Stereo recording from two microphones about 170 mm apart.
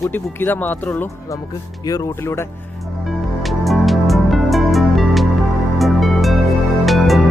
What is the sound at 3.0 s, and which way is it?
Music, centre (ahead or behind).